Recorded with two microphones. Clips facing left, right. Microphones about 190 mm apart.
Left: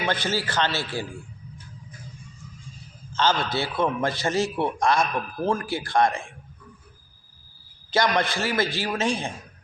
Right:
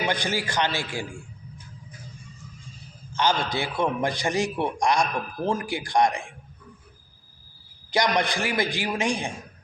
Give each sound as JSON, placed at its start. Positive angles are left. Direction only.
{"t": 0.0, "sound": "a man's voice", "side_deg": -15}
{"t": 3.1, "sound": "a man's voice", "side_deg": -15}
{"t": 7.9, "sound": "a man's voice", "side_deg": -15}